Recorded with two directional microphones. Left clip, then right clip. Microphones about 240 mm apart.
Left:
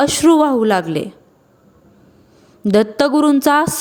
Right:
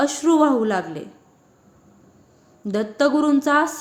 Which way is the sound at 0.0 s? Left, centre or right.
Left.